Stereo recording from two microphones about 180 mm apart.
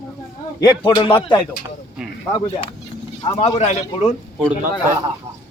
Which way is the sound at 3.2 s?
35° left (ahead or behind).